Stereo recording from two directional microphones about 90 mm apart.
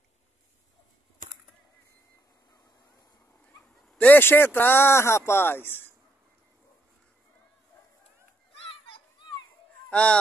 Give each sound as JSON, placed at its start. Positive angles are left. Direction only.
{"t": 3.6, "sound": "dog", "side_deg": 5}
{"t": 4.0, "sound": "speech", "side_deg": 20}
{"t": 8.5, "sound": "children playing", "side_deg": 90}
{"t": 9.8, "sound": "speech", "side_deg": 10}